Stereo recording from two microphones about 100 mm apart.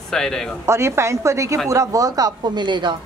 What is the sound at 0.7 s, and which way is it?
A woman's voice, 25° right (ahead or behind).